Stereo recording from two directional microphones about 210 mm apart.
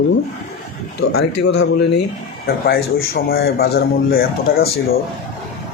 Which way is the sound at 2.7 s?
45° left (ahead or behind).